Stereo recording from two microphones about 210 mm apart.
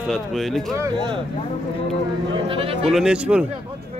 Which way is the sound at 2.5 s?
25° right (ahead or behind).